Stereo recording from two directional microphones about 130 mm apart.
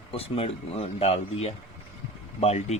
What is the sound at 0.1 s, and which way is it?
Speech, 50° left (ahead or behind).